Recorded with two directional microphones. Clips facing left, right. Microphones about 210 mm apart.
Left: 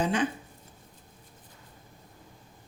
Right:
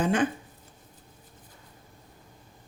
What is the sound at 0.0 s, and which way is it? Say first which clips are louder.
Speech: right 2 dB; 50° right (ahead or behind).